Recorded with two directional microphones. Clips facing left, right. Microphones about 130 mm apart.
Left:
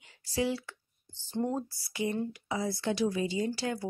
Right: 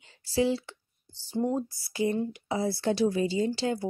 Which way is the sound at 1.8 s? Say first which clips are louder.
Right 5 dB; 30° right (ahead or behind).